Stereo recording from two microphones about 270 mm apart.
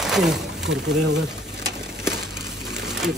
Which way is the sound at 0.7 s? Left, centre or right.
Right.